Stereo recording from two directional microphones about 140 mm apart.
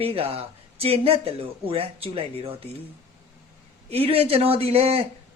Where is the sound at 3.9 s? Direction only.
45° right (ahead or behind).